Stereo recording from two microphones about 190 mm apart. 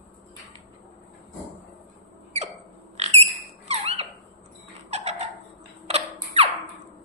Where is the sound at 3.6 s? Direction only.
35° right (ahead or behind).